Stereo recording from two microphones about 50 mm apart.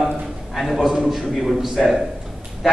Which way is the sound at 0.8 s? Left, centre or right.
Centre.